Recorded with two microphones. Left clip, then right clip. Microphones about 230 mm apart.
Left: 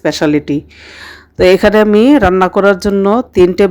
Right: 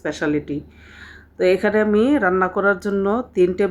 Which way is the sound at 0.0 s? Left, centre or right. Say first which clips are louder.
Left 10 dB; left.